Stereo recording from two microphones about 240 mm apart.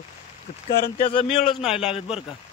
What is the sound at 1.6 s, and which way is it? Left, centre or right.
Speech, centre.